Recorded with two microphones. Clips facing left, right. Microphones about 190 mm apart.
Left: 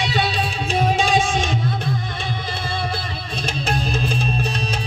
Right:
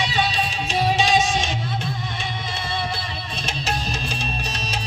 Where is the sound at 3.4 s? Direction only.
55° left (ahead or behind).